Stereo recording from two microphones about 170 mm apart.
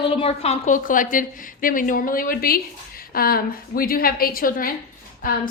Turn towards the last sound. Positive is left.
turn(degrees=60)  # may be behind; listen again after turning